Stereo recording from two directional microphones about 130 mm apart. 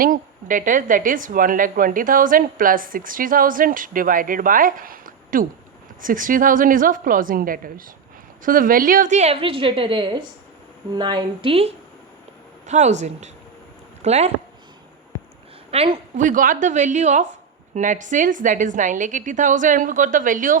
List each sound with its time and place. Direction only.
0.0 s a woman's voice: 90° right; by 11.7 s 45° right (ahead or behind)
12.6 s speech: 65° right (ahead or behind)
15.7 s a woman's voice: 50° right (ahead or behind)
16.2 s a woman's voice: 90° right